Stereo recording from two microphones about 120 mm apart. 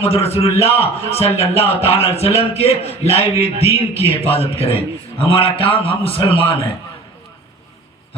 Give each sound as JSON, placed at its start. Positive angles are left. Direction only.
{"t": 0.0, "sound": "a man's voice", "side_deg": 55}